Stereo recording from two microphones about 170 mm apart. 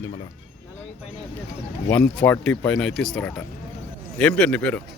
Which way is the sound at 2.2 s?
5° left (ahead or behind).